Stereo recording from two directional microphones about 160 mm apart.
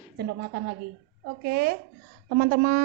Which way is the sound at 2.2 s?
55° right (ahead or behind).